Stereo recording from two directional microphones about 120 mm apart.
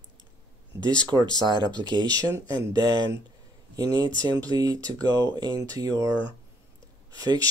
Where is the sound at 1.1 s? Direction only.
35° right (ahead or behind).